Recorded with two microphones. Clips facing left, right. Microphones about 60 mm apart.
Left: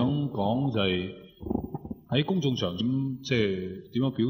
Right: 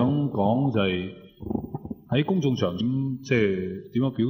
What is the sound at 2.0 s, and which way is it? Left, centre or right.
A man's voice, centre.